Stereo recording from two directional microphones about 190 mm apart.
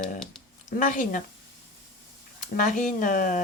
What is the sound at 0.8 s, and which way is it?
Speech, 45° left (ahead or behind).